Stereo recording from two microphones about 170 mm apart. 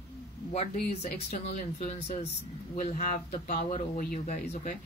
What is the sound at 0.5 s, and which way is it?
Speech, 40° left (ahead or behind).